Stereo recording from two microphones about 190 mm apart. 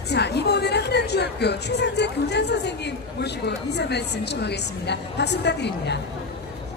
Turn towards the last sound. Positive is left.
turn(degrees=60)  # may be behind; listen again after turning